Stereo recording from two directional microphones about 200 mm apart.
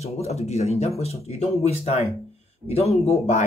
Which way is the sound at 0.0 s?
30° left (ahead or behind).